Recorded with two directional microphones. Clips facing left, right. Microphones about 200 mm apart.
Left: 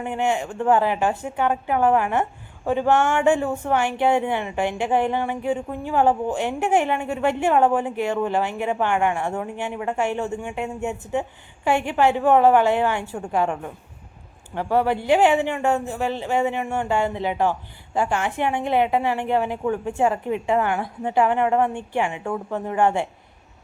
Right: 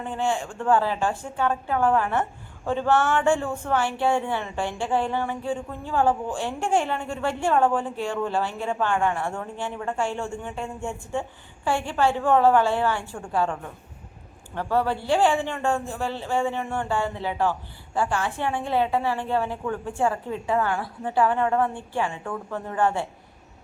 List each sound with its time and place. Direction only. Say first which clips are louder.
0.0 s a woman's voice: left 3 dB; 15° left (ahead or behind)